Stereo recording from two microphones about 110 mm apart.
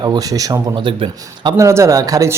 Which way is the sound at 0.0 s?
35° right (ahead or behind).